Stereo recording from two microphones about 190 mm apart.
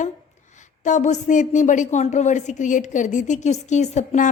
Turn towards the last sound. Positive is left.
turn(degrees=40)  # may be behind; listen again after turning